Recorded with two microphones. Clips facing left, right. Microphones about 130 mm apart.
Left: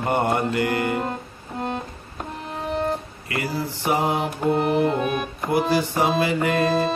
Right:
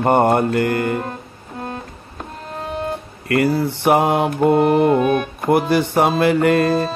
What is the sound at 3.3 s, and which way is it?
A man's voice, 60° right (ahead or behind).